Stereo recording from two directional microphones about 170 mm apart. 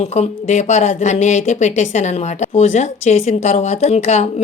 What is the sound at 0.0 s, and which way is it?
Speech, 40° left (ahead or behind).